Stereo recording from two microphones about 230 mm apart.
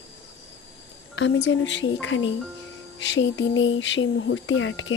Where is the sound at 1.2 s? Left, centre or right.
Left.